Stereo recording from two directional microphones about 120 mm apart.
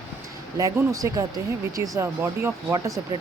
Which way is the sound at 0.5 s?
30° right (ahead or behind).